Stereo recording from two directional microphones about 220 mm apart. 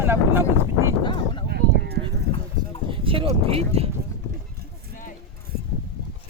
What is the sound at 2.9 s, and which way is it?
Speech, 25° right (ahead or behind).